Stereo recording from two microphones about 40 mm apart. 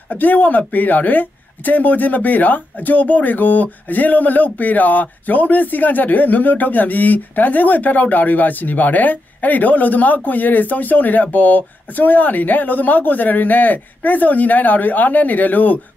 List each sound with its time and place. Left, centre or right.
0.1 s speech: left